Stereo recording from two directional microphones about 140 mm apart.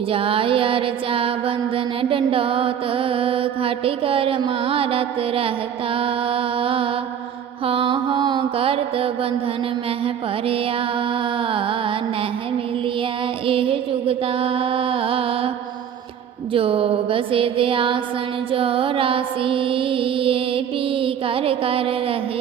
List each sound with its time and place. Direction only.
0.1 s music: 40° right (ahead or behind)
18.5 s mantra: 40° right (ahead or behind)